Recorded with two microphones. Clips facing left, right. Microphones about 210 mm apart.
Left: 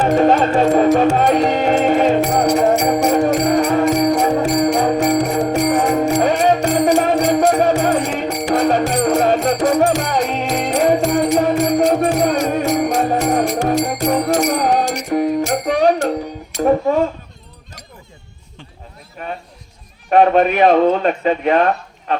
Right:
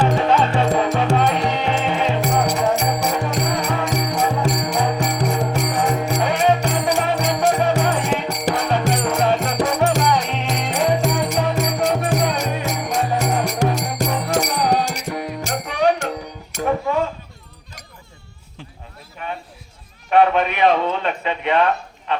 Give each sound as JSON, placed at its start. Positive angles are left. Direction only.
{"t": 0.0, "sound": "music", "side_deg": 45}
{"t": 16.6, "sound": "dishes", "side_deg": 40}
{"t": 19.2, "sound": "a sound", "side_deg": 40}